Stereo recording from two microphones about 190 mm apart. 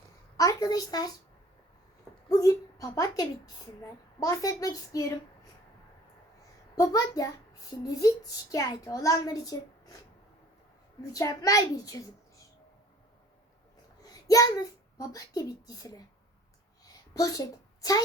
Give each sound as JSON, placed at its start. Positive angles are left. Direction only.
{"t": 0.3, "sound": "a woman's voice", "side_deg": 20}
{"t": 2.3, "sound": "a woman's voice", "side_deg": 20}
{"t": 6.7, "sound": "a woman's voice", "side_deg": 20}
{"t": 11.0, "sound": "a child's voice", "side_deg": 20}
{"t": 14.1, "sound": "a child's voice", "side_deg": 20}
{"t": 16.8, "sound": "a sound", "side_deg": 20}